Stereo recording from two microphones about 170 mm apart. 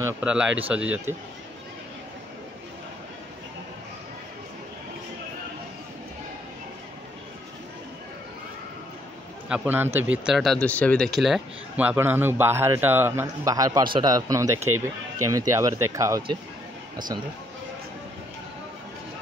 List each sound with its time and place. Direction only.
0.0 s speech: 5° right (ahead or behind)
9.5 s speech: 10° right (ahead or behind)